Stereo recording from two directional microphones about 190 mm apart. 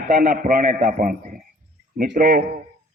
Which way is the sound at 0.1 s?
45° right (ahead or behind).